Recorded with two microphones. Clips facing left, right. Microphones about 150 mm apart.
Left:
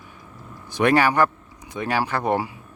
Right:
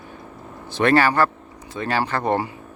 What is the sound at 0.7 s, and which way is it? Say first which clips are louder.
Speech: right 1 dB; 15° left (ahead or behind).